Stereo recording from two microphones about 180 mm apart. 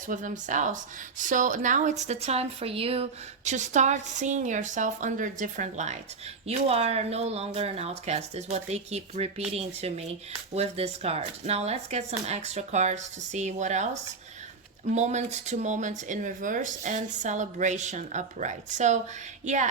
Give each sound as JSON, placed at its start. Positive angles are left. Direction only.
{"t": 0.1, "sound": "a woman's voice", "side_deg": -45}